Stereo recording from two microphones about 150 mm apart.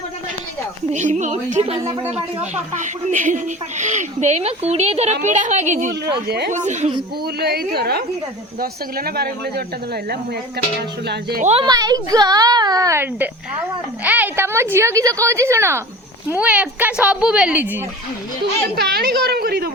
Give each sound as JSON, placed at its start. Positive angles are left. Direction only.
{"t": 0.9, "sound": "speech", "side_deg": -55}
{"t": 2.7, "sound": "speech", "side_deg": -55}
{"t": 6.2, "sound": "speech", "side_deg": -90}
{"t": 6.5, "sound": "speech", "side_deg": -55}
{"t": 7.3, "sound": "speech", "side_deg": -90}
{"t": 10.8, "sound": "speech", "side_deg": -90}
{"t": 11.6, "sound": "a woman's voice", "side_deg": -25}
{"t": 18.8, "sound": "speech", "side_deg": -90}